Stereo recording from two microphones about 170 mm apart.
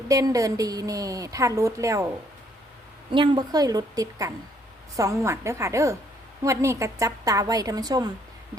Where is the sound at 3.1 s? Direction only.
30° right (ahead or behind).